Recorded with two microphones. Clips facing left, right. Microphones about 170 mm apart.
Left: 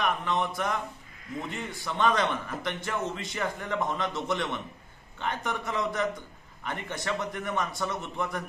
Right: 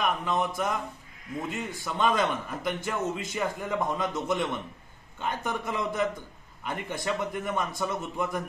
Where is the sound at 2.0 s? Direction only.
10° right (ahead or behind).